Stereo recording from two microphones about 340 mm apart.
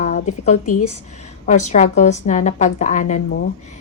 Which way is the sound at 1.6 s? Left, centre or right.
Left.